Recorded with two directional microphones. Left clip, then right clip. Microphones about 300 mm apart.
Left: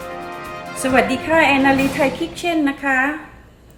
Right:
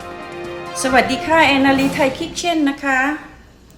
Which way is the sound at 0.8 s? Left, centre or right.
Centre.